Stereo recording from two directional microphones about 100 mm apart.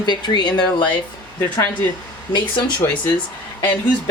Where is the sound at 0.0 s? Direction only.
45° left (ahead or behind).